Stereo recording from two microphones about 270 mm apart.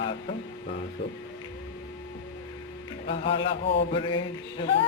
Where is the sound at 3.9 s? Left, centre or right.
Centre.